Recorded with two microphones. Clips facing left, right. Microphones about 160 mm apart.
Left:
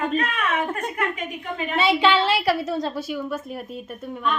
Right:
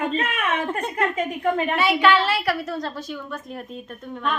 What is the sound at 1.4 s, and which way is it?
Speech, 55° right (ahead or behind).